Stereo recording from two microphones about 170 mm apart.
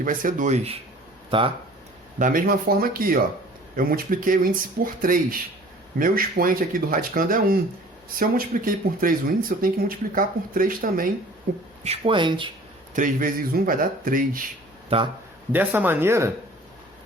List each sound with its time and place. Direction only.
0.0 s speech: 55° right (ahead or behind)
2.1 s speech: 50° right (ahead or behind)
11.8 s speech: 35° right (ahead or behind)
12.9 s speech: 50° right (ahead or behind)
14.8 s speech: 30° right (ahead or behind)
15.5 s speech: 10° right (ahead or behind)